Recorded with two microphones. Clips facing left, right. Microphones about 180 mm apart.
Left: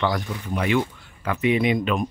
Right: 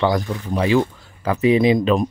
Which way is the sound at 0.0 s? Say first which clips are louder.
Right 5 dB; 30° right (ahead or behind).